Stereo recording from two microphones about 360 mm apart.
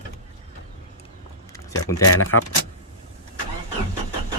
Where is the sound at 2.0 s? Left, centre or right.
Left.